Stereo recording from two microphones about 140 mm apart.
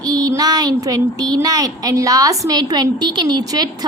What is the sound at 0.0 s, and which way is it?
A woman's voice, 25° right (ahead or behind).